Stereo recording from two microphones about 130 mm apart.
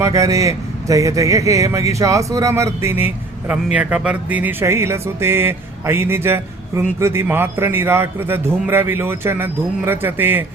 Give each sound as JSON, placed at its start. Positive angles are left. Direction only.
{"t": 0.0, "sound": "speech", "side_deg": -25}